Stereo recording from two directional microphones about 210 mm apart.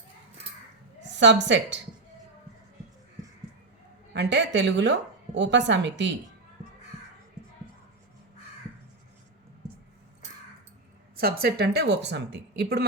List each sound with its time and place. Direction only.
1.2 s a woman's voice: 55° right (ahead or behind)
4.1 s a woman's voice: 55° right (ahead or behind)
11.2 s a woman's voice: 45° right (ahead or behind)